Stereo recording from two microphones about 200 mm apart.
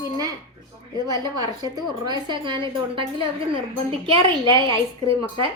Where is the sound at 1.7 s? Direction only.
20° right (ahead or behind).